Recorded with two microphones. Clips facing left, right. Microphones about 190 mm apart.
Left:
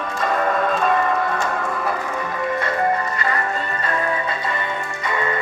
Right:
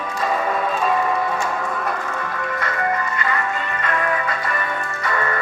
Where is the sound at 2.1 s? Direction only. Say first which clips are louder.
Left 3 dB; 15° left (ahead or behind).